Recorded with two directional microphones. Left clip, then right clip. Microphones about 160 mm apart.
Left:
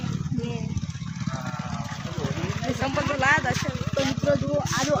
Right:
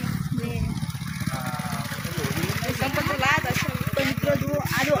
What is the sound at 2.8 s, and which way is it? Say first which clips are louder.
Speech: left 1 dB; 40° left (ahead or behind).